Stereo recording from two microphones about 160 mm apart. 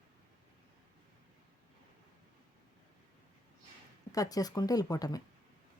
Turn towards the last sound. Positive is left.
turn(degrees=25)  # may be behind; listen again after turning